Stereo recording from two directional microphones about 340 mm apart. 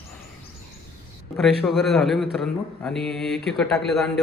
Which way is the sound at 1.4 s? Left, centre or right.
Centre.